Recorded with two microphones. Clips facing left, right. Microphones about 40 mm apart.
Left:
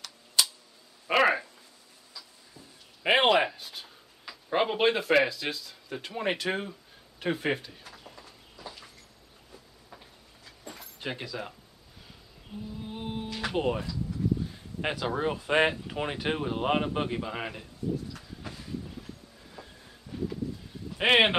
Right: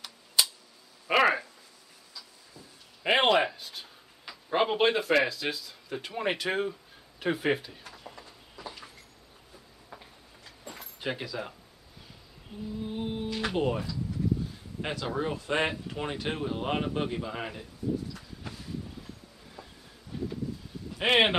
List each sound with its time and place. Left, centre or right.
1.0 s a sound: centre
2.1 s speech: centre
8.0 s a sound: centre
10.6 s keys jangling: centre
11.0 s speech: centre
12.8 s music: centre
13.6 s a man's voice: centre
19.6 s train: centre
20.1 s a sound: centre
21.0 s a man's voice: centre